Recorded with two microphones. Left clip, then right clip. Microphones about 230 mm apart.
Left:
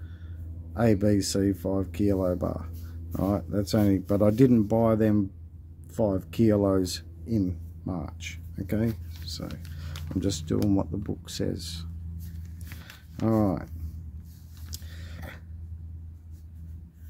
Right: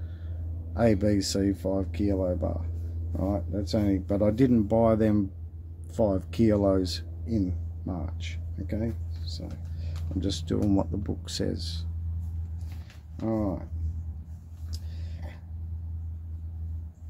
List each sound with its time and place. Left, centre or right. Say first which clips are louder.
0.7 s speech: even; centre; by 10.3 s left
10.3 s speech: right 1 dB; centre
13.2 s speech: left 4 dB; left
14.7 s vehicle: left 3 dB; left